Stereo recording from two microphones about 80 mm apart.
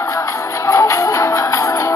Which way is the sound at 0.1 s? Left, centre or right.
Left.